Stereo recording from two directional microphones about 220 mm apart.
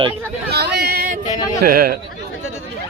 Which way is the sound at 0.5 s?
50° right (ahead or behind).